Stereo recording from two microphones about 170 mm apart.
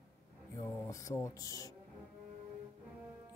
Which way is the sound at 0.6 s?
20° left (ahead or behind).